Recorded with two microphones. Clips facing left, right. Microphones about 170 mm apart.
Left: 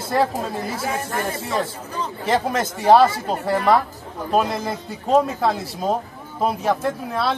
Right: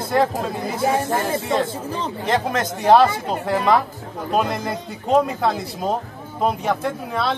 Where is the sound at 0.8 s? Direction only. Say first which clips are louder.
Right 11 dB; 25° right (ahead or behind).